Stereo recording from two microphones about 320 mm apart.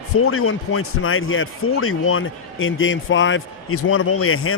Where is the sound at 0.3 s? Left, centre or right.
Left.